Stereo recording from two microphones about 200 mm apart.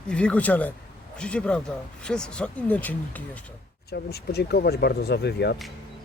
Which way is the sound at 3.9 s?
55° left (ahead or behind).